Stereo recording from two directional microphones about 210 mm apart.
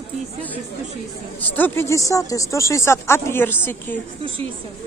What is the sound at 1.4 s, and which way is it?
A woman's voice, 10° left (ahead or behind).